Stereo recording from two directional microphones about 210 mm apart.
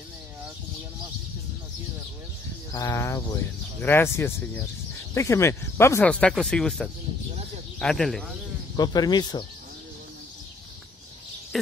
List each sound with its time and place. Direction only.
2.7 s speech: 15° left (ahead or behind)
8.7 s speech: 20° left (ahead or behind)
11.5 s speech: centre (ahead or behind)